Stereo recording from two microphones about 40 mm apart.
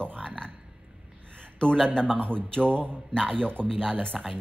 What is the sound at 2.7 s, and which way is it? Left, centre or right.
Speech, right.